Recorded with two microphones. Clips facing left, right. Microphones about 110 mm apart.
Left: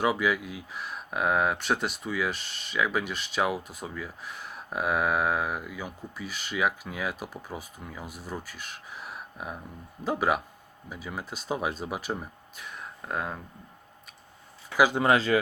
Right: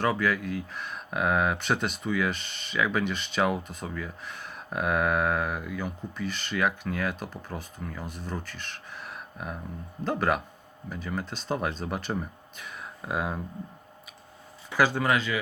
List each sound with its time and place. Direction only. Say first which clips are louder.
0.0 s speech: even; 10° left (ahead or behind); by 13.4 s 5° right (ahead or behind)
14.8 s speech: left 1 dB; 15° left (ahead or behind)
15.0 s speech: left 4 dB; 35° left (ahead or behind)